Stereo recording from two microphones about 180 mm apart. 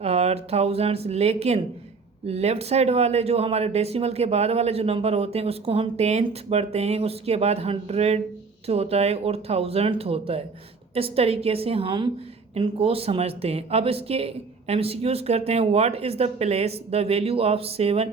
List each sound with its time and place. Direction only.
0.0 s speech: 35° right (ahead or behind)